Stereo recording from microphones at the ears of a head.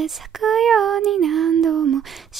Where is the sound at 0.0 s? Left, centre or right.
Right.